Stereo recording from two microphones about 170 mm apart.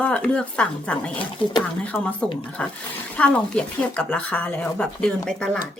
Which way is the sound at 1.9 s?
15° left (ahead or behind).